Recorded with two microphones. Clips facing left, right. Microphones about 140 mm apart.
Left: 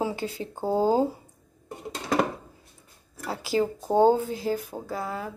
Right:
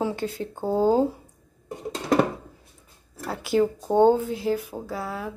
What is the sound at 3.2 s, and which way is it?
Speech, centre (ahead or behind).